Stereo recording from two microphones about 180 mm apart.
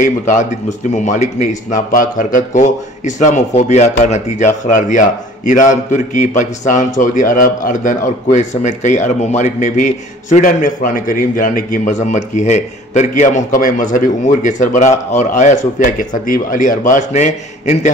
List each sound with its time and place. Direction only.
0.0 s speech: 45° left (ahead or behind)